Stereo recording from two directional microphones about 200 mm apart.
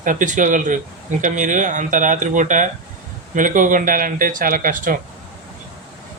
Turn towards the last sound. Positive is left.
turn(degrees=-45)  # may be behind; listen again after turning